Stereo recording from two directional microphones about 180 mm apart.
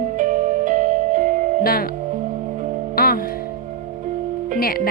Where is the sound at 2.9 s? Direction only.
55° left (ahead or behind).